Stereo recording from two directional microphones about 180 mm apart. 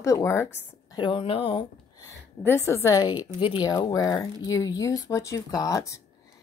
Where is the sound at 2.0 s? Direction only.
15° left (ahead or behind).